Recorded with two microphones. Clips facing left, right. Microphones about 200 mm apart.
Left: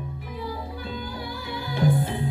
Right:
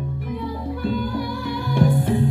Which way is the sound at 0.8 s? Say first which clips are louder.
Right 10 dB; 55° right (ahead or behind).